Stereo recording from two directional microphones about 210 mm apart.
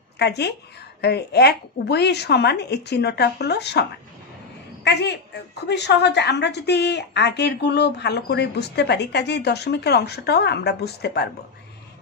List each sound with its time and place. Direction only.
0.2 s a woman's voice: 55° left (ahead or behind)
4.8 s a woman's voice: 55° left (ahead or behind)